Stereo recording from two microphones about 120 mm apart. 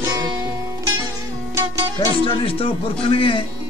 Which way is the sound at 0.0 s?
30° right (ahead or behind).